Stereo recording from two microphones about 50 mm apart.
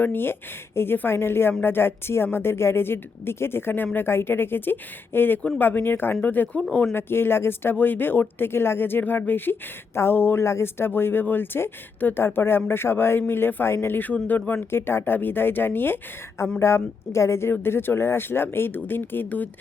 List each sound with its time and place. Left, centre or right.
0.0 s speech: left
6.9 s speech: left
9.9 s speech: left
10.4 s speech: left
14.3 s speech: left
14.7 s speech: left
16.6 s a woman's voice: left
17.5 s speech: left